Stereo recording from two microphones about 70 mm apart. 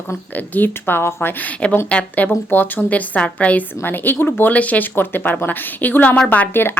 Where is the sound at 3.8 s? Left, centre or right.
Left.